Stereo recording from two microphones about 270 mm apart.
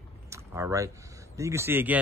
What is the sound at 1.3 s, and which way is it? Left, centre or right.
Speech, centre.